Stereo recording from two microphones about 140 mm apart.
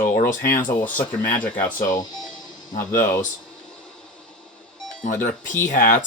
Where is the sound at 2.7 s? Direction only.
70° left (ahead or behind).